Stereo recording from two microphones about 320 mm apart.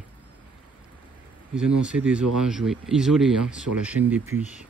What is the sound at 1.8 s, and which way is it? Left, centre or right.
Speech, centre.